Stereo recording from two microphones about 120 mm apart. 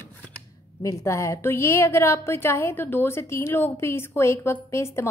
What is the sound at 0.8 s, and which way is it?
A woman's voice, 25° left (ahead or behind).